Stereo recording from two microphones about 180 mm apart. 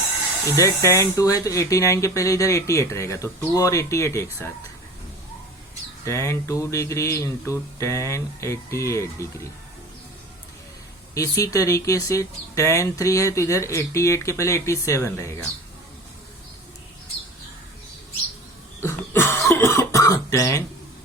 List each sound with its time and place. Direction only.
0.5 s speech: 15° left (ahead or behind)
6.1 s speech: 15° left (ahead or behind)
11.1 s speech: 20° left (ahead or behind)
18.8 s cough: 15° left (ahead or behind)